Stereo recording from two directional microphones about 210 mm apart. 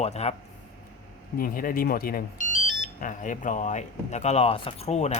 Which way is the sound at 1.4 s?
40° left (ahead or behind).